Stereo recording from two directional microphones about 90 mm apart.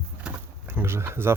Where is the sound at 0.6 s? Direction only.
25° right (ahead or behind).